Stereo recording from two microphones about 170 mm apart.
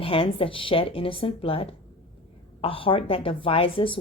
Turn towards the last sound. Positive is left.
turn(degrees=30)  # may be behind; listen again after turning